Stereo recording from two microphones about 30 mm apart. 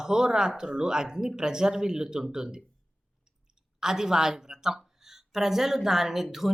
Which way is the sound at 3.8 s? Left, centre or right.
Centre.